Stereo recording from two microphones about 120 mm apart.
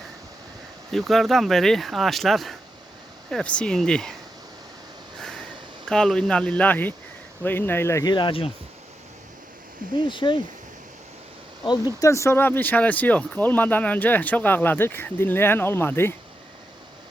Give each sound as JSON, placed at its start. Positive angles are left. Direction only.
{"t": 0.9, "sound": "speech", "side_deg": 0}
{"t": 5.9, "sound": "speech", "side_deg": 5}
{"t": 8.0, "sound": "speech", "side_deg": 40}
{"t": 9.9, "sound": "speech", "side_deg": 40}
{"t": 11.9, "sound": "speech", "side_deg": 25}